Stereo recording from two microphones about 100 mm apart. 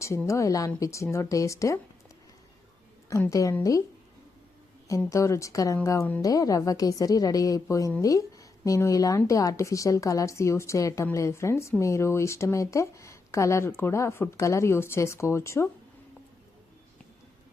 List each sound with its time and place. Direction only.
0.0 s speech: 30° left (ahead or behind)
3.2 s speech: 35° left (ahead or behind)
4.9 s speech: 30° left (ahead or behind)